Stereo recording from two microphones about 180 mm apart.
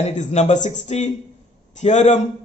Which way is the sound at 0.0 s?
40° left (ahead or behind).